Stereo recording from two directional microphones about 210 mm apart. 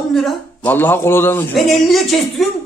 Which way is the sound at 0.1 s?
Centre (ahead or behind).